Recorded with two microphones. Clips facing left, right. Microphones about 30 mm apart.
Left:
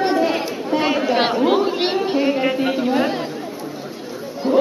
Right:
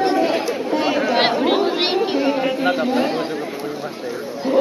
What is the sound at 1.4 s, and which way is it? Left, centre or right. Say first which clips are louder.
Chatter: left 1 dB; right.